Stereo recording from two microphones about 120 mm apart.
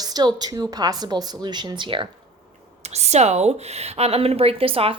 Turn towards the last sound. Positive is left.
turn(degrees=-50)  # may be behind; listen again after turning